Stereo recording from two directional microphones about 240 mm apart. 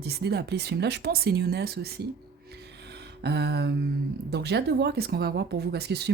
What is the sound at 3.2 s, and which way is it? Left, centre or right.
Speech, right.